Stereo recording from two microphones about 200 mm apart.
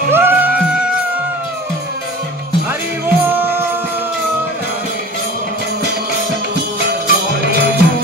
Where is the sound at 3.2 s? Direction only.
10° right (ahead or behind).